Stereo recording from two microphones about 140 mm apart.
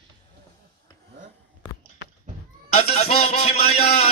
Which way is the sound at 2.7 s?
50° left (ahead or behind).